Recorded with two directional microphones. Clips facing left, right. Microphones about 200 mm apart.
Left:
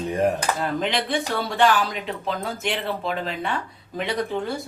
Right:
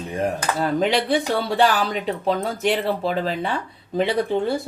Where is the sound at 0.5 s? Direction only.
40° right (ahead or behind).